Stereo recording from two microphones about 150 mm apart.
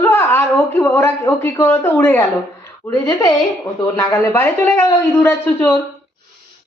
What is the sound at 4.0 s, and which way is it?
Speech, 15° left (ahead or behind).